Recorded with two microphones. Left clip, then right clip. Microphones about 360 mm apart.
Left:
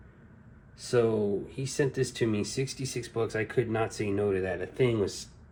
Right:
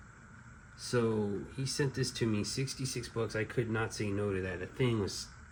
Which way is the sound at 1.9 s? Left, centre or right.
Centre.